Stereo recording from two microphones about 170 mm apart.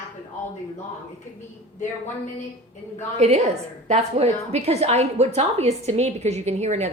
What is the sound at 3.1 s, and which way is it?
A woman's voice, 40° right (ahead or behind).